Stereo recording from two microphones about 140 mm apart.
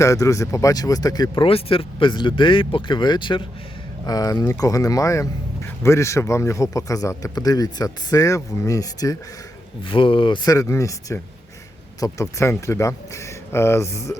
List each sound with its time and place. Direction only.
0.0 s speech: 20° left (ahead or behind)
1.5 s speech: 40° left (ahead or behind); by 9.1 s 25° left (ahead or behind)
9.8 s speech: 40° left (ahead or behind); by 14.2 s 20° left (ahead or behind)